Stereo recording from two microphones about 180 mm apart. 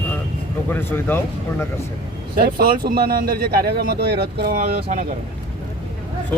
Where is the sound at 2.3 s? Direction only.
60° right (ahead or behind).